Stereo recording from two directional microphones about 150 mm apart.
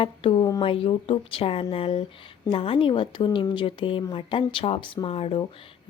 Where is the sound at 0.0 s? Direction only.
35° left (ahead or behind).